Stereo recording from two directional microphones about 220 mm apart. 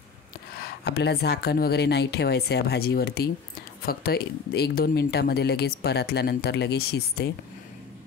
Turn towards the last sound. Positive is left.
turn(degrees=45)  # may be behind; listen again after turning